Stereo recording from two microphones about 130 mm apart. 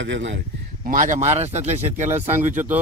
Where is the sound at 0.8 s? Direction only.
85° right; by 2.1 s 65° right (ahead or behind).